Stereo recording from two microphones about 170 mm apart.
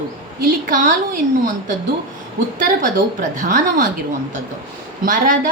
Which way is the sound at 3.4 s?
50° right (ahead or behind).